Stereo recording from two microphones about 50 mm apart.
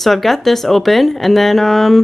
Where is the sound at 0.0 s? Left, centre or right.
Centre.